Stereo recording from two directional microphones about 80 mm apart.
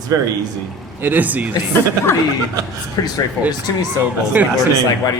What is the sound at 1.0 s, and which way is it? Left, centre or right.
Speech, right.